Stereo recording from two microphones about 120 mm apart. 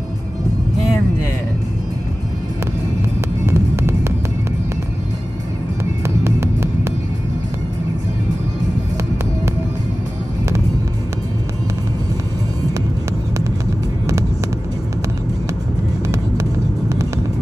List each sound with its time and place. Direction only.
3.4 s music: 20° right (ahead or behind)
6.0 s music: 20° right (ahead or behind)